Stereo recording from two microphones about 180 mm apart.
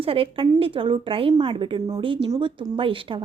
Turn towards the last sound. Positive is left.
turn(degrees=-30)  # may be behind; listen again after turning